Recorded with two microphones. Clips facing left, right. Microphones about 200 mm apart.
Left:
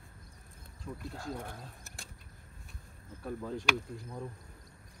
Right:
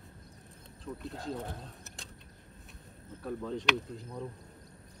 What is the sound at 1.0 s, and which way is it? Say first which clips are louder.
Speech: right 3 dB; 5° left (ahead or behind).